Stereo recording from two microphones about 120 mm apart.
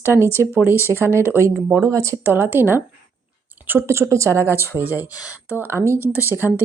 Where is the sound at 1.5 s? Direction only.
5° right (ahead or behind).